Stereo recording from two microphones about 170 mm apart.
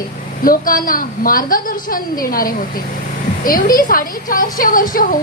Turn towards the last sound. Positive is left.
turn(degrees=55)  # may be behind; listen again after turning